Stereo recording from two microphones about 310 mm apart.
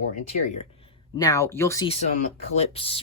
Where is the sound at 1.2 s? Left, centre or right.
Centre.